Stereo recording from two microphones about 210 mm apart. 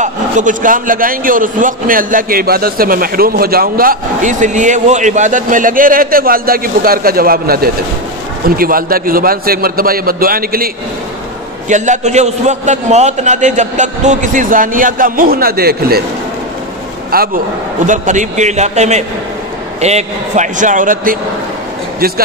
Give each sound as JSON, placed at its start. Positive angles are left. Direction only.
{"t": 0.0, "sound": "a man's voice", "side_deg": -35}
{"t": 11.7, "sound": "a man's voice", "side_deg": -35}
{"t": 17.1, "sound": "a man's voice", "side_deg": -45}